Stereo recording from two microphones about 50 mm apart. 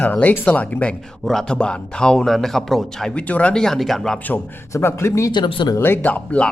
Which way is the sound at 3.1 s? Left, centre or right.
Left.